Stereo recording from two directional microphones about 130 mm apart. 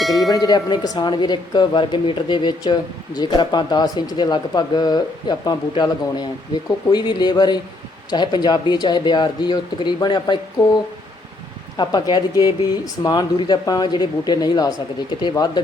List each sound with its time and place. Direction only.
0.0 s tubular bells: centre (ahead or behind)
0.3 s speech: 30° left (ahead or behind)
11.8 s speech: 35° left (ahead or behind)